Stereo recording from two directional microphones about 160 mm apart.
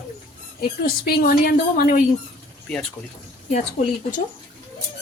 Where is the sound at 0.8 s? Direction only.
75° left (ahead or behind).